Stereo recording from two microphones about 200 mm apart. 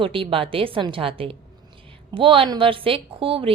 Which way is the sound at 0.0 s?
25° right (ahead or behind).